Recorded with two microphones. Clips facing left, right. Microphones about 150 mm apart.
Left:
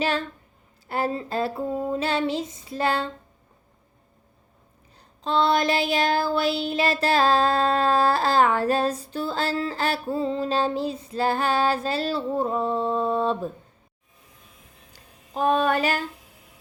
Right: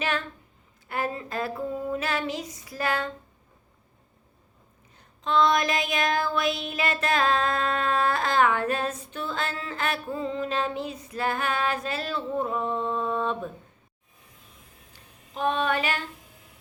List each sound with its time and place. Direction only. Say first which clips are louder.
0.0 s child singing: left 4 dB; 35° left (ahead or behind)
0.9 s female singing: left 4 dB; 30° left (ahead or behind)
4.9 s child singing: even; 35° left (ahead or behind)
14.9 s speech: left 6 dB; 40° left (ahead or behind)